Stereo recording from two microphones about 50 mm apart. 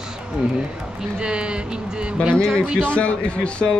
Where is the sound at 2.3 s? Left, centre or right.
Centre.